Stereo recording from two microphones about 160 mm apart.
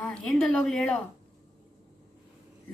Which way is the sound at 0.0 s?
5° left (ahead or behind).